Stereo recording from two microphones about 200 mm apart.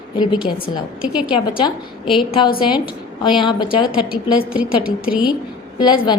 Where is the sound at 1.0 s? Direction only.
5° right (ahead or behind).